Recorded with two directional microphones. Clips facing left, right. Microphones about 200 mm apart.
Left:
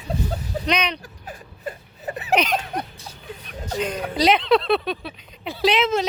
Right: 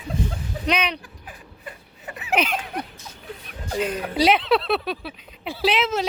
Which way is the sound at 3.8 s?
5° right (ahead or behind).